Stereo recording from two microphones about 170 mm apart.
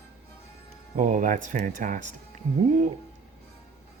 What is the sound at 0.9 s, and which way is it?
Speech, 50° right (ahead or behind).